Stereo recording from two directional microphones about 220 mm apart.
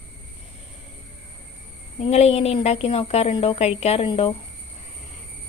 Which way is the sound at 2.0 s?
30° left (ahead or behind).